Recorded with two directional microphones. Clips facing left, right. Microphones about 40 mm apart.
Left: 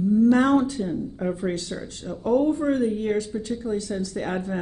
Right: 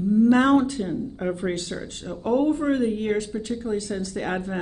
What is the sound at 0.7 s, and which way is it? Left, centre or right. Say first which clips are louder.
Speech: even; right.